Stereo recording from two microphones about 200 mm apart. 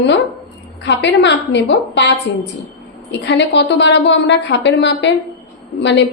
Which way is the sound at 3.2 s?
60° left (ahead or behind).